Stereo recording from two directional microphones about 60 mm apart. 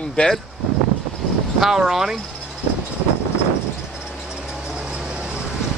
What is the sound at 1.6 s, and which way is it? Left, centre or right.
Speech, centre.